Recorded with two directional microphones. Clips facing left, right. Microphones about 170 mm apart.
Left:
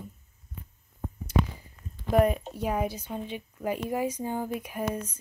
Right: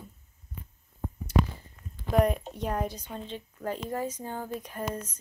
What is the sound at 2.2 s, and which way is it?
A woman's voice, 5° left (ahead or behind).